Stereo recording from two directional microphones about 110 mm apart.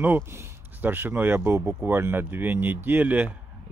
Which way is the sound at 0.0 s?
20° right (ahead or behind).